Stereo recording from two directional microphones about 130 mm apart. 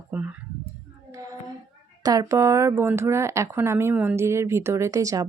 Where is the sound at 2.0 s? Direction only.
30° right (ahead or behind).